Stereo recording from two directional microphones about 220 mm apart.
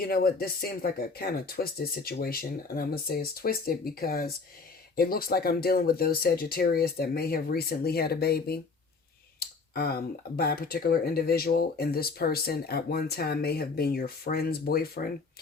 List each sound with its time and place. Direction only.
0.0 s speech: 40° left (ahead or behind)